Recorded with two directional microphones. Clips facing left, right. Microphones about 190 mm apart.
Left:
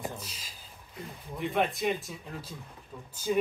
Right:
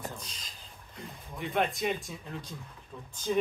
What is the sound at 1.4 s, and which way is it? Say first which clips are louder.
Speech: left 1 dB; centre (ahead or behind).